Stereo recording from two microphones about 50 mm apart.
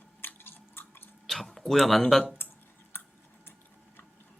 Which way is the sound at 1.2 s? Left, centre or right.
Centre.